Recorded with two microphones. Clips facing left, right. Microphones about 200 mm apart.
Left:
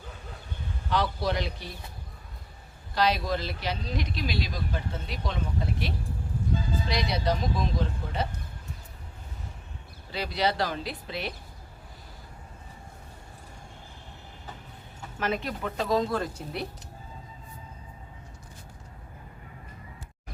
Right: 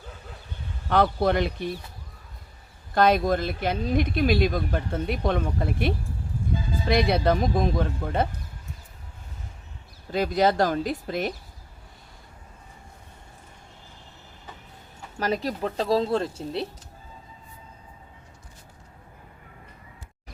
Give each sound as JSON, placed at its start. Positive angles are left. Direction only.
{"t": 0.9, "sound": "speech", "side_deg": -55}
{"t": 2.9, "sound": "speech", "side_deg": -50}
{"t": 10.1, "sound": "speech", "side_deg": -45}
{"t": 15.2, "sound": "speech", "side_deg": -35}